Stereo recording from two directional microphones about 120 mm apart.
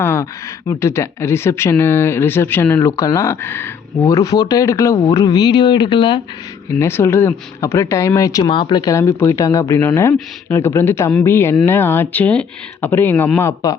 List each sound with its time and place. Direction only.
0.0 s speech: 20° left (ahead or behind)
4.1 s speech: 30° left (ahead or behind)
6.7 s speech: 20° left (ahead or behind)